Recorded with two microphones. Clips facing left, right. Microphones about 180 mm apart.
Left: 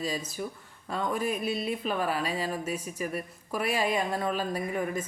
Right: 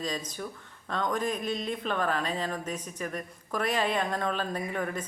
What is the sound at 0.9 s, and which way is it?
Speech, 10° left (ahead or behind).